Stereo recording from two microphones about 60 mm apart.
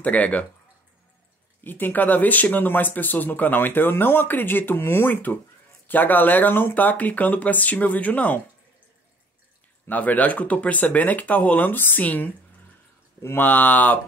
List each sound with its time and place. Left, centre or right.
0.0 s speech: left
1.6 s speech: left
9.8 s speech: left
13.4 s speech: left